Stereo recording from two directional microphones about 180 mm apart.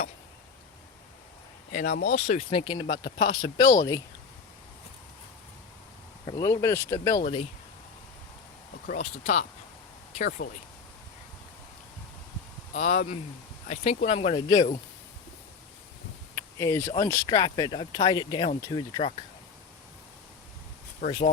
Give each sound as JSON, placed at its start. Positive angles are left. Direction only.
{"t": 1.7, "sound": "speech", "side_deg": 55}
{"t": 2.5, "sound": "speech", "side_deg": 30}
{"t": 6.2, "sound": "speech", "side_deg": 20}
{"t": 8.9, "sound": "speech", "side_deg": 40}
{"t": 10.2, "sound": "speech", "side_deg": 50}
{"t": 12.8, "sound": "speech", "side_deg": 45}
{"t": 13.7, "sound": "speech", "side_deg": 35}
{"t": 16.3, "sound": "a sound", "side_deg": 15}
{"t": 16.9, "sound": "speech", "side_deg": 20}
{"t": 21.0, "sound": "speech", "side_deg": 45}